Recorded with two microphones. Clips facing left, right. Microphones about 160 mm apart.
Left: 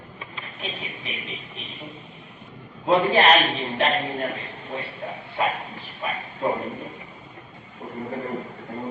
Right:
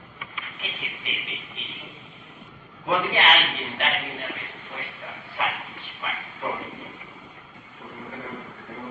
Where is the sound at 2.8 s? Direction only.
30° left (ahead or behind).